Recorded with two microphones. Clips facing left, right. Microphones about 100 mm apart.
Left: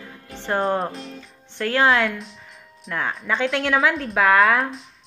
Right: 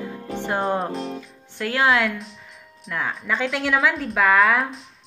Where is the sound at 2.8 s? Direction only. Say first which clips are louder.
Left 1 dB; centre (ahead or behind).